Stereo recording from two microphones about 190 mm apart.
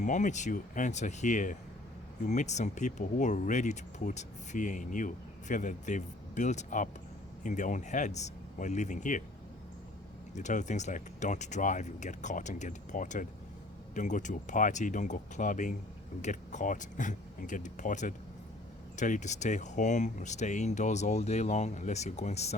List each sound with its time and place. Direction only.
0.0 s speech: 40° left (ahead or behind)
10.3 s speech: 40° left (ahead or behind)